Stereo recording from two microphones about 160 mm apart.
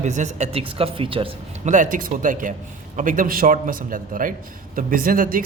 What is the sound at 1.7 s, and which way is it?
Speech, 55° right (ahead or behind).